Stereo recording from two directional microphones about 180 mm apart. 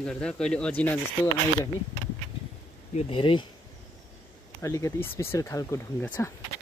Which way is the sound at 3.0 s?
30° left (ahead or behind).